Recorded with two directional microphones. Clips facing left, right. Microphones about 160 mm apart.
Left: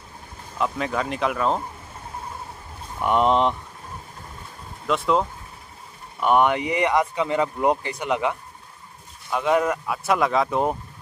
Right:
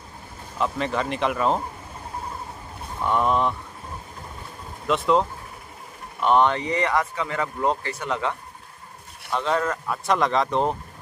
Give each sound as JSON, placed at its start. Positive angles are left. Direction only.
{"t": 0.6, "sound": "speech", "side_deg": 0}
{"t": 3.0, "sound": "speech", "side_deg": 20}
{"t": 4.8, "sound": "speech", "side_deg": 0}
{"t": 6.2, "sound": "speech", "side_deg": 10}